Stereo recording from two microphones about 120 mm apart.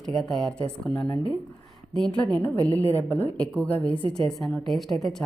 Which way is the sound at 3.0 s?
15° left (ahead or behind).